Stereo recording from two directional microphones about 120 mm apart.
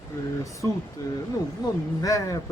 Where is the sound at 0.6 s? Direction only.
20° left (ahead or behind).